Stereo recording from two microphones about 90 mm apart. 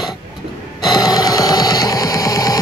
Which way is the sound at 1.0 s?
45° left (ahead or behind).